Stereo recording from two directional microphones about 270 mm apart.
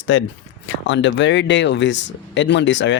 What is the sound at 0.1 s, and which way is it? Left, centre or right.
Speech, left.